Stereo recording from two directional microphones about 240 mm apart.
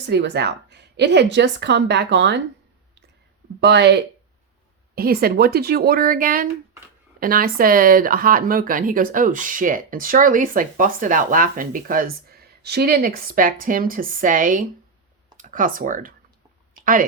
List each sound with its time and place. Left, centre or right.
0.0 s a woman's voice: right
3.6 s a woman's voice: right